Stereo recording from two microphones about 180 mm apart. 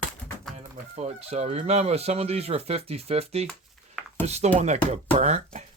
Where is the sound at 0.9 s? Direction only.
35° right (ahead or behind).